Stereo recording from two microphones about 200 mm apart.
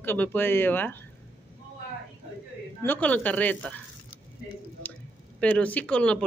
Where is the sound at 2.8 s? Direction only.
10° left (ahead or behind).